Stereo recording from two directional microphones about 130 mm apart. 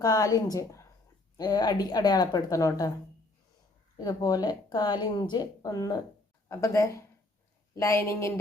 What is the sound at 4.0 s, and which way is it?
A woman's voice, 30° left (ahead or behind).